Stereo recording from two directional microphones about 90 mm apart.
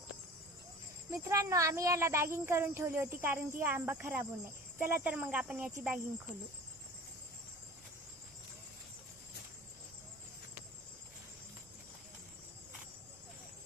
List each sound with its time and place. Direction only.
1.1 s speech: 35° right (ahead or behind); by 5.7 s 20° right (ahead or behind)